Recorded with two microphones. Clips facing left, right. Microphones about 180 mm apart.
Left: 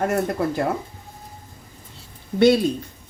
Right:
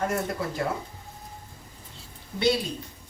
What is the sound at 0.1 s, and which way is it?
Speech, 60° left (ahead or behind).